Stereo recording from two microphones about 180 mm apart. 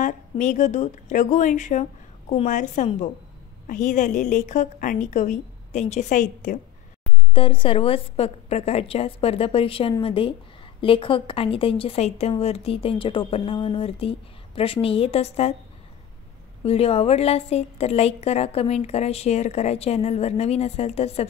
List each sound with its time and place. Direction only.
0.0 s a woman's voice: 45° left (ahead or behind)
7.3 s a woman's voice: 30° left (ahead or behind)
16.6 s a woman's voice: 35° left (ahead or behind)